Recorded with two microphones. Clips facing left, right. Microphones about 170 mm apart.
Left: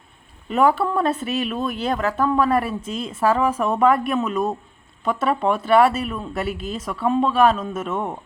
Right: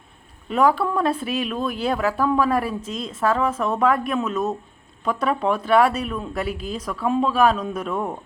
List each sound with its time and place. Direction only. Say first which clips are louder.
0.4 s speech: left 1 dB; centre (ahead or behind)